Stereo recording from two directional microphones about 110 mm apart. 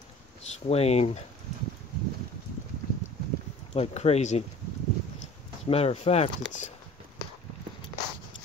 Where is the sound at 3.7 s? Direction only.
70° left (ahead or behind).